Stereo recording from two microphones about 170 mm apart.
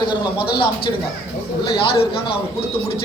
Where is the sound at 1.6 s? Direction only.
30° left (ahead or behind).